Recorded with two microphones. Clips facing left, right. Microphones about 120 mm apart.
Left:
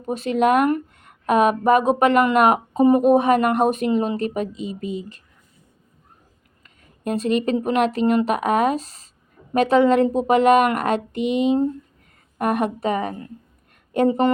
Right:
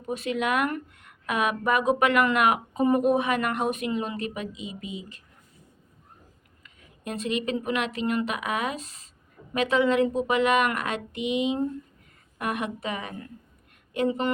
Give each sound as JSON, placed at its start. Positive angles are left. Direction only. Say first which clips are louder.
{"t": 0.0, "sound": "speech", "louder": "left 8 dB", "side_deg": 35}
{"t": 6.6, "sound": "speech", "louder": "left 8 dB", "side_deg": 40}